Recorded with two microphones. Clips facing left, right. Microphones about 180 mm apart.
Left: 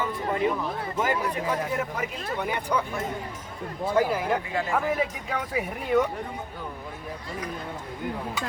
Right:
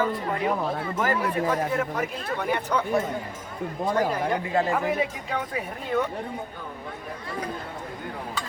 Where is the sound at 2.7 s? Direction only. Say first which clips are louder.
Left 1 dB; 10° left (ahead or behind).